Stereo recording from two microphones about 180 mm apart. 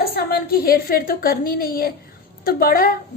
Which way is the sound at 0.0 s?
60° left (ahead or behind).